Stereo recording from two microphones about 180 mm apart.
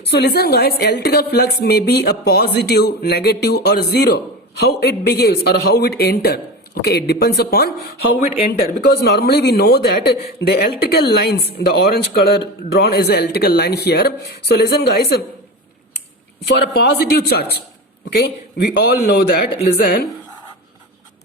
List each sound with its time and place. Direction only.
0.1 s a woman's voice: 65° left (ahead or behind)
16.6 s a woman's voice: 65° left (ahead or behind)